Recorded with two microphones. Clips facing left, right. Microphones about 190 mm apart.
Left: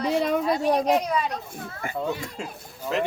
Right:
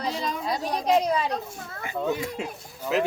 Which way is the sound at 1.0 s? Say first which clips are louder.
Right 1 dB; 30° right (ahead or behind).